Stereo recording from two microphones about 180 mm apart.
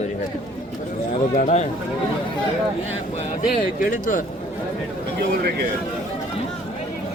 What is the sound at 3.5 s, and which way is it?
Speech, 50° left (ahead or behind).